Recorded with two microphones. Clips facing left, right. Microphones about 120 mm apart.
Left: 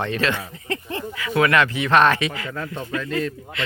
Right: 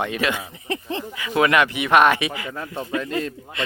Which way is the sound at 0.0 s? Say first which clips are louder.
Even; 15° right (ahead or behind).